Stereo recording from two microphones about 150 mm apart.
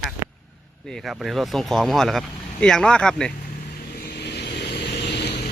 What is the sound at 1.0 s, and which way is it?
Speech, 5° right (ahead or behind).